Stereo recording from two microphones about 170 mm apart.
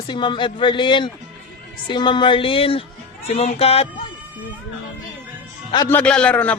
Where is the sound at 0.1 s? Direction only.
30° left (ahead or behind).